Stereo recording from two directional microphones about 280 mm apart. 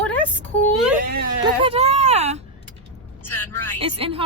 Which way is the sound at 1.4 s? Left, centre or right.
Right.